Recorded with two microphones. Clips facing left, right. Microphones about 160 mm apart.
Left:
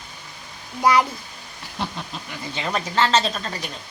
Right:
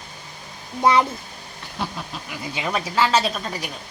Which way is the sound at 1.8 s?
Centre (ahead or behind).